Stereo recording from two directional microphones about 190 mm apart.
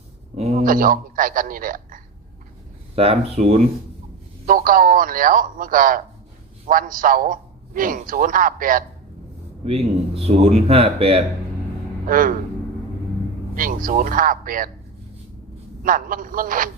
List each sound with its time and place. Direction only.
0.3 s a sound: 35° right (ahead or behind)
0.6 s a man's voice: 45° right (ahead or behind)
2.9 s a man's voice: 30° right (ahead or behind)
4.4 s a man's voice: 45° right (ahead or behind)
9.6 s a man's voice: 30° right (ahead or behind)
12.0 s a man's voice: 45° right (ahead or behind)
13.6 s a man's voice: 45° right (ahead or behind)
15.8 s a man's voice: 45° right (ahead or behind)